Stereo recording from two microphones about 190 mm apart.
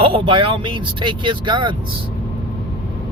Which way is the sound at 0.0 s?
30° right (ahead or behind).